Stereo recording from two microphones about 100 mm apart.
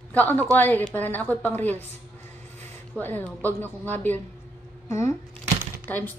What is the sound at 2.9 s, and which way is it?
A woman's voice, 20° left (ahead or behind).